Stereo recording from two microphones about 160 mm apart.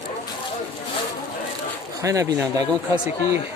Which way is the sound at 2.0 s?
20° right (ahead or behind).